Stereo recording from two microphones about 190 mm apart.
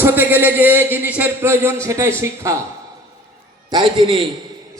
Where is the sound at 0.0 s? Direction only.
10° right (ahead or behind).